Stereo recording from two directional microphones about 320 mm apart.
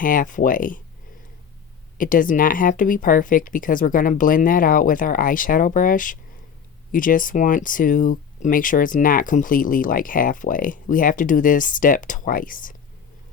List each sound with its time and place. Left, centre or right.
0.0 s speech: left
2.0 s speech: left